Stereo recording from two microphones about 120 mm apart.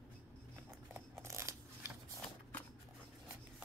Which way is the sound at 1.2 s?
25° right (ahead or behind).